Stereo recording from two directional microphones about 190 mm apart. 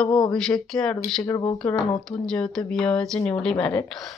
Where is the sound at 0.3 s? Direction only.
5° left (ahead or behind).